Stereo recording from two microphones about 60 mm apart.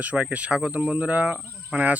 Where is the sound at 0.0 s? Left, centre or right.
Right.